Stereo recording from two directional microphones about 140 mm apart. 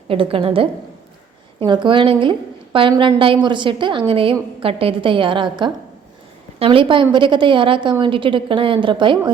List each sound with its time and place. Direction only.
0.1 s a woman's voice: 40° right (ahead or behind)